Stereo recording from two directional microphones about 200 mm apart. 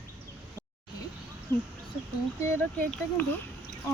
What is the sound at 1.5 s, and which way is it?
Speech, 15° left (ahead or behind).